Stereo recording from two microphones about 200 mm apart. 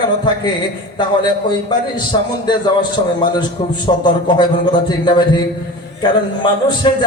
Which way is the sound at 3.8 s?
25° left (ahead or behind).